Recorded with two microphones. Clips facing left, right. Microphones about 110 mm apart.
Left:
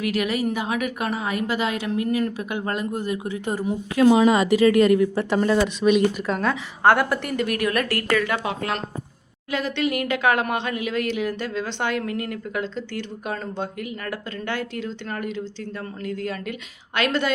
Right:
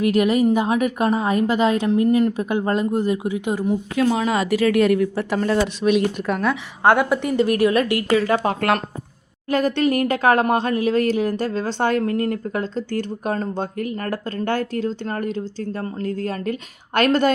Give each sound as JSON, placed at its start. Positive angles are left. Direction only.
{"t": 0.0, "sound": "a woman's voice", "side_deg": -35}
{"t": 3.4, "sound": "speech", "side_deg": 0}
{"t": 4.0, "sound": "speech", "side_deg": 15}
{"t": 4.3, "sound": "speech", "side_deg": 0}
{"t": 6.2, "sound": "a woman's voice", "side_deg": -15}
{"t": 7.3, "sound": "speech", "side_deg": -30}
{"t": 8.2, "sound": "a woman's voice", "side_deg": -35}
{"t": 9.5, "sound": "a woman's voice", "side_deg": -45}